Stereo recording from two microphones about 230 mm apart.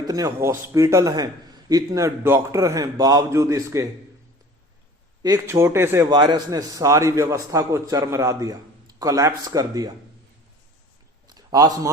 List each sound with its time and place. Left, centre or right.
0.1 s a man's voice: centre
5.2 s a man's voice: centre
11.3 s a sound: centre